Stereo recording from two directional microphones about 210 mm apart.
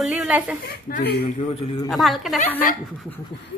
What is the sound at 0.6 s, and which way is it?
Speech, 45° left (ahead or behind).